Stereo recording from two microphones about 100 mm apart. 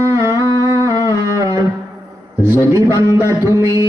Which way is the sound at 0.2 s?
35° right (ahead or behind).